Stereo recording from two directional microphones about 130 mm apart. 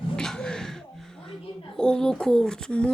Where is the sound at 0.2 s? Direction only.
5° left (ahead or behind).